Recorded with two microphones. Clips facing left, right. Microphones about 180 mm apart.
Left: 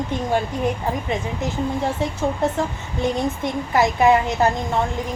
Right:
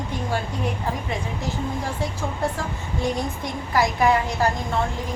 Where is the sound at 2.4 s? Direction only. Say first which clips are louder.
Left 5 dB; 20° left (ahead or behind).